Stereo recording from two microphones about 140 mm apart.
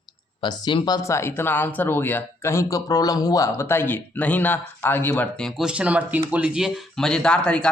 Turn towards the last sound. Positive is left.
turn(degrees=5)  # may be behind; listen again after turning